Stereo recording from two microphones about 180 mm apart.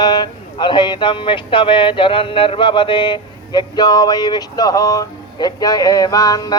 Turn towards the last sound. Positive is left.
turn(degrees=20)  # may be behind; listen again after turning